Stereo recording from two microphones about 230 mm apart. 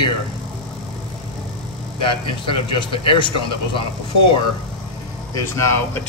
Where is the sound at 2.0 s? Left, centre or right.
Left.